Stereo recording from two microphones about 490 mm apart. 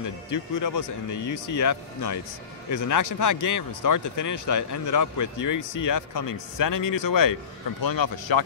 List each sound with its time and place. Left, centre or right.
0.0 s speech: left